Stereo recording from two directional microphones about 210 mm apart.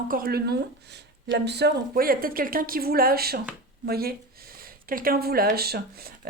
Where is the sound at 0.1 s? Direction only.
45° right (ahead or behind).